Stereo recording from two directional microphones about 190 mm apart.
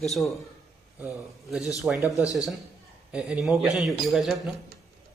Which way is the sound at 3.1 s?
5° right (ahead or behind).